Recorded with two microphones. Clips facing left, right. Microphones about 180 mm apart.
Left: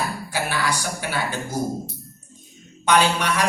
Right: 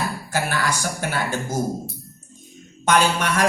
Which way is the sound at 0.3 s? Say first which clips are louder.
Right 2 dB; 45° right (ahead or behind).